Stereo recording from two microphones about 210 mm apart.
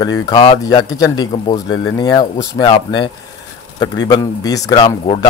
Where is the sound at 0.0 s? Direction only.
20° left (ahead or behind).